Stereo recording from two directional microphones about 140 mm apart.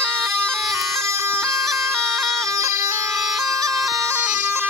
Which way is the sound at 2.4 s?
20° right (ahead or behind).